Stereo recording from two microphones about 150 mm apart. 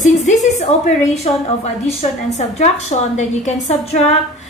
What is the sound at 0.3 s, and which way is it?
A woman's voice, 50° left (ahead or behind).